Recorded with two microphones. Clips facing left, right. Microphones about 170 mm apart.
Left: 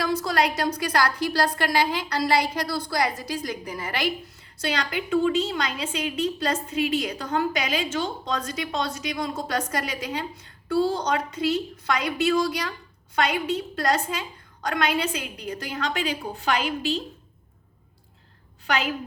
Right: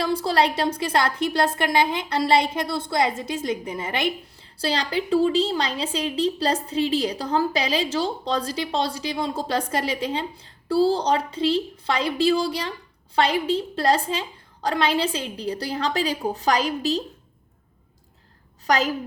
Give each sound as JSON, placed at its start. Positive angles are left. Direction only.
{"t": 0.0, "sound": "a woman's voice", "side_deg": -30}
{"t": 18.6, "sound": "a woman's voice", "side_deg": -40}